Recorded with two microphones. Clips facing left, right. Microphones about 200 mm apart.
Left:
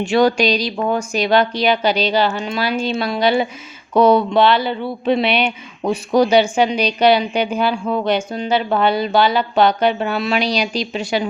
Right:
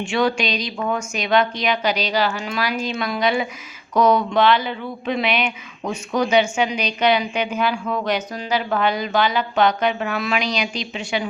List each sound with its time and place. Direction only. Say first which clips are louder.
0.0 s speech: left 6 dB; 40° left (ahead or behind)